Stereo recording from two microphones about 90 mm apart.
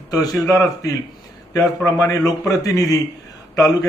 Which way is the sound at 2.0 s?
40° left (ahead or behind).